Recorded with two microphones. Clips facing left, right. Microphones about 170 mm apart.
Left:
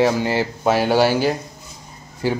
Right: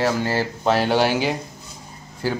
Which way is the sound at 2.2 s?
15° left (ahead or behind).